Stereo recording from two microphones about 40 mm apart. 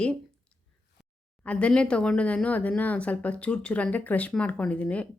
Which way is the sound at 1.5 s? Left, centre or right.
Left.